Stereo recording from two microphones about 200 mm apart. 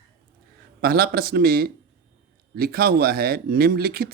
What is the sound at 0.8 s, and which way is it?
Speech, 50° right (ahead or behind).